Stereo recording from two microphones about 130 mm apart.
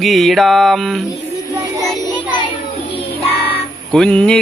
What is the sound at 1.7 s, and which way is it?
Child singing, 35° left (ahead or behind).